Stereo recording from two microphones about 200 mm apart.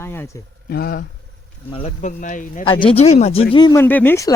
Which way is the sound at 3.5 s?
20° left (ahead or behind).